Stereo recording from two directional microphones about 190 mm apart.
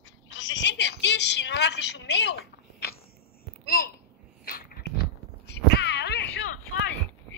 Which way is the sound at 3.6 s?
50° left (ahead or behind).